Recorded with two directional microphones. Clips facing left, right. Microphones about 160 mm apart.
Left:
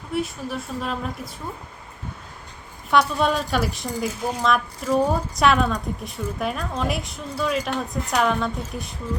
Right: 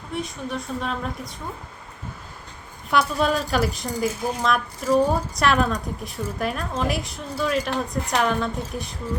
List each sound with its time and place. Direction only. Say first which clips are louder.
0.1 s a woman's voice: left 2 dB; 5° left (ahead or behind)
2.9 s a woman's voice: left 1 dB; centre (ahead or behind)